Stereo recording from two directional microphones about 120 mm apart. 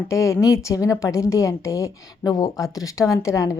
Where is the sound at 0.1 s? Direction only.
25° left (ahead or behind).